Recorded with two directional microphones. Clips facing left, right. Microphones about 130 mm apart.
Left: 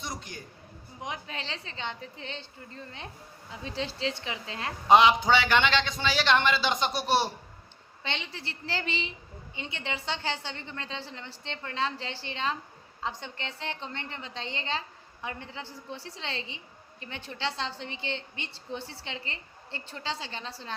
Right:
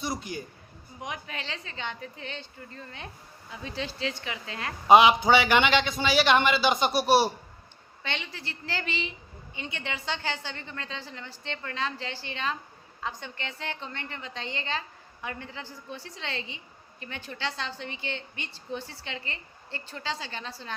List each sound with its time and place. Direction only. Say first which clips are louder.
0.0 s a man's voice: right 6 dB; 5° right (ahead or behind)
1.0 s a woman's voice: even; 25° left (ahead or behind)
4.9 s a man's voice: right 2 dB; 10° right (ahead or behind)
8.0 s a woman's voice: even; 25° left (ahead or behind)